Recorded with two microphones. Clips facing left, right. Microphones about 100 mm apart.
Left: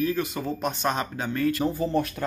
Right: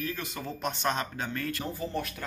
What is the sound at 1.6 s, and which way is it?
Speech, 30° left (ahead or behind).